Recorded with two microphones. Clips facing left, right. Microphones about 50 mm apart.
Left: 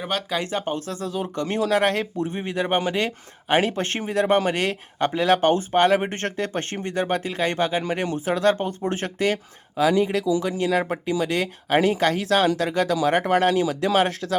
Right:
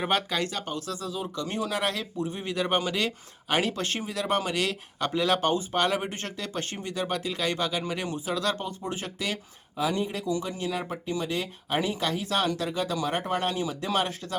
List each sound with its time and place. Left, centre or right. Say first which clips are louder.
0.4 s speech: left 6 dB; left
1.0 s speech: left 6 dB; left
2.4 s speech: left 4 dB; left
9.7 s speech: left 8 dB; left
10.6 s speech: left 9 dB; left
12.2 s speech: left 7 dB; left